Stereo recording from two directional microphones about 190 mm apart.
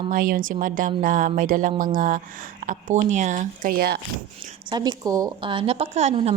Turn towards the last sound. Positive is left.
turn(degrees=-35)  # may be behind; listen again after turning